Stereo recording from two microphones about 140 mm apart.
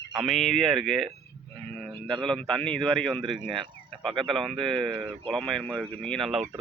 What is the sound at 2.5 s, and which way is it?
Speech, 5° left (ahead or behind).